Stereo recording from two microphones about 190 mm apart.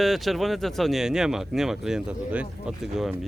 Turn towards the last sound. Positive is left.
turn(degrees=0)  # may be behind; listen again after turning